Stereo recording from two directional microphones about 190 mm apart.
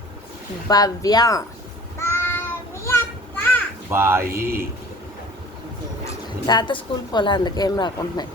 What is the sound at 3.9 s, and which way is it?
Speech, 15° right (ahead or behind).